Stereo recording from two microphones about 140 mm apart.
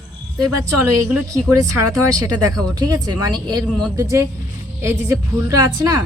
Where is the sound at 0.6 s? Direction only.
20° right (ahead or behind).